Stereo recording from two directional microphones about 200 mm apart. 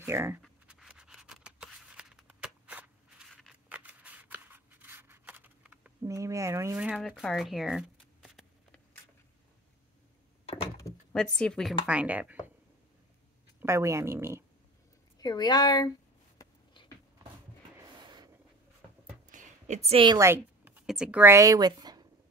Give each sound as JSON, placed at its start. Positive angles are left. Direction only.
{"t": 0.0, "sound": "speech", "side_deg": -10}
{"t": 0.4, "sound": "scratch", "side_deg": -5}
{"t": 10.4, "sound": "door", "side_deg": 30}
{"t": 11.1, "sound": "speech", "side_deg": 5}
{"t": 13.6, "sound": "speech", "side_deg": -15}
{"t": 15.1, "sound": "a woman's voice", "side_deg": 20}
{"t": 17.7, "sound": "a sound", "side_deg": -20}
{"t": 19.2, "sound": "a sound", "side_deg": -40}
{"t": 20.2, "sound": "speech", "side_deg": -10}